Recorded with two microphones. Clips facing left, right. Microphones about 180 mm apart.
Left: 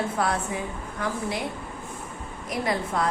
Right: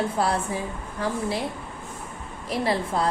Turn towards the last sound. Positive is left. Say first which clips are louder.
# right 2 dB
turn(degrees=-30)  # may be behind; listen again after turning